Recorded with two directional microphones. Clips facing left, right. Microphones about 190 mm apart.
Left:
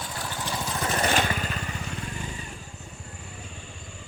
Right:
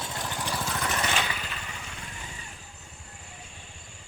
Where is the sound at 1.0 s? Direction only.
50° left (ahead or behind).